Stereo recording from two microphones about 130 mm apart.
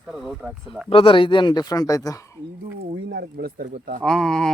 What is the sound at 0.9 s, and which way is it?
Speech, 45° left (ahead or behind).